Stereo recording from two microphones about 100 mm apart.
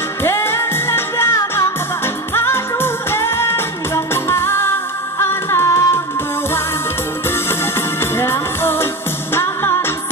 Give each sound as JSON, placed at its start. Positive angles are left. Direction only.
{"t": 0.2, "sound": "music", "side_deg": 25}
{"t": 8.0, "sound": "music", "side_deg": 25}